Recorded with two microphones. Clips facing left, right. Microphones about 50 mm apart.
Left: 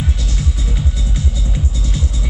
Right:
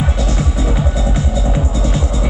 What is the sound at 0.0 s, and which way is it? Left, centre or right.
Music, right.